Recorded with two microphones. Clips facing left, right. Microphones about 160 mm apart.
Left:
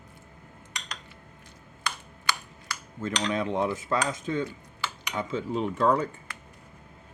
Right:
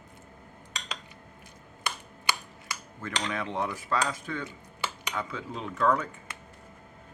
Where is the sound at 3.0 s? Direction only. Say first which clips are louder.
Left 5 dB; 20° left (ahead or behind).